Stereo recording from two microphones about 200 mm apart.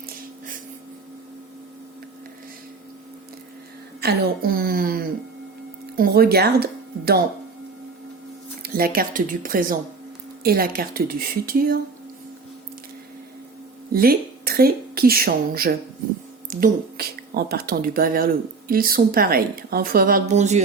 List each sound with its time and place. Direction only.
4.0 s a woman's voice: 50° right (ahead or behind)
8.6 s a woman's voice: 50° right (ahead or behind)
13.9 s a woman's voice: 50° right (ahead or behind)